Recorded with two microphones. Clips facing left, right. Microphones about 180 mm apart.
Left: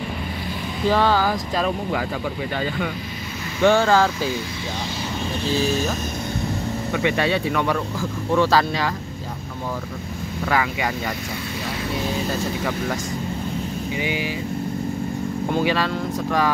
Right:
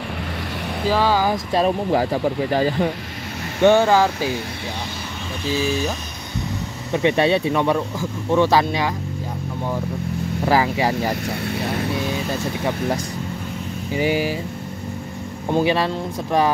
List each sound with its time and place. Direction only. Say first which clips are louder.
0.8 s speech: even; 5° right (ahead or behind)
1.3 s speech: right 4 dB; 30° right (ahead or behind)
3.6 s speech: right 2 dB; 20° right (ahead or behind)
6.9 s speech: right 5 dB; 25° right (ahead or behind)
10.4 s speech: right 4 dB; 30° right (ahead or behind)
13.9 s speech: right 7 dB; 40° right (ahead or behind)
15.6 s speech: right 3 dB; 25° right (ahead or behind)